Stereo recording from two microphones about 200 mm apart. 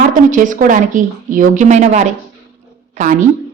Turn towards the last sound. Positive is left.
turn(degrees=-40)  # may be behind; listen again after turning